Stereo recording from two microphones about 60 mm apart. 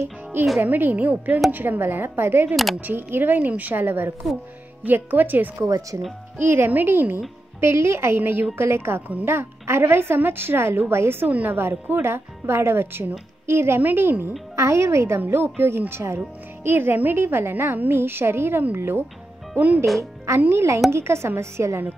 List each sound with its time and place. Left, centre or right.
0.3 s a woman's voice: right
2.5 s speech: centre
2.8 s a woman's voice: right
5.7 s speech: right
6.3 s a woman's voice: right
7.6 s a woman's voice: right
8.2 s a woman's voice: right
11.2 s a woman's voice: right
14.5 s a woman's voice: right
16.6 s a woman's voice: right
19.5 s speech: right
20.3 s a woman's voice: right